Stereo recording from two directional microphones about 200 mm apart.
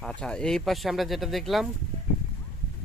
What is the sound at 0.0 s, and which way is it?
Speech, 5° left (ahead or behind).